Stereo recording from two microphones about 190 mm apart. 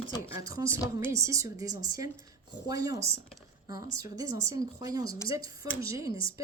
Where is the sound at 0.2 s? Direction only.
15° right (ahead or behind).